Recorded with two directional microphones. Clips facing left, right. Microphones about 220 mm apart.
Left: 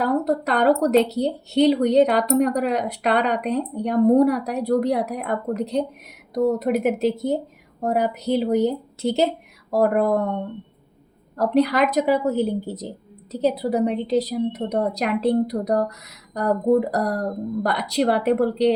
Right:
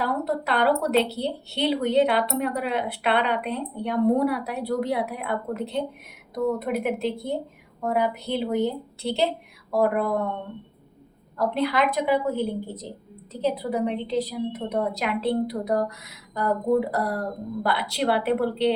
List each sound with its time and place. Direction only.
0.0 s speech: 40° left (ahead or behind)
11.3 s speech: 40° left (ahead or behind)